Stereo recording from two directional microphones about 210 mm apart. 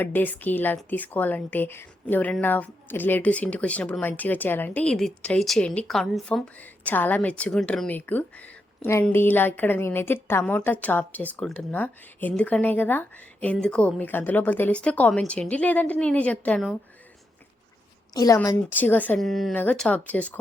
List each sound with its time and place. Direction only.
0.0 s a woman's voice: 10° left (ahead or behind)
18.1 s a woman's voice: 15° left (ahead or behind)